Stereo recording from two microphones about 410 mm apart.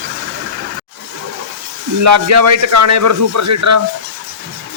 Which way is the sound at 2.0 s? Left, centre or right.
Right.